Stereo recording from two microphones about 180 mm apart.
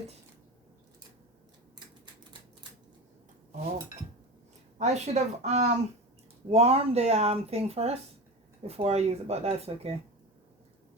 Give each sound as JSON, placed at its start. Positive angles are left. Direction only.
{"t": 4.8, "sound": "speech", "side_deg": -40}